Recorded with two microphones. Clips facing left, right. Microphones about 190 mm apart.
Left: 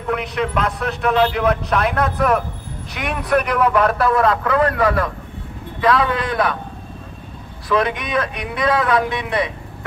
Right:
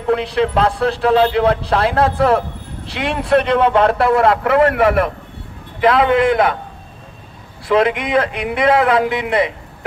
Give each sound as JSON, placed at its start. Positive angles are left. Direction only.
{"t": 0.0, "sound": "speech", "side_deg": -30}
{"t": 7.6, "sound": "speech", "side_deg": -25}